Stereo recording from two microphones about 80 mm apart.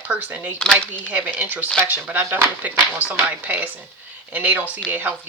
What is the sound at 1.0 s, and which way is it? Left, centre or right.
Speech, centre.